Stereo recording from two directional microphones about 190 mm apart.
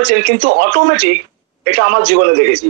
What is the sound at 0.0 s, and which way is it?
Speech, 50° right (ahead or behind).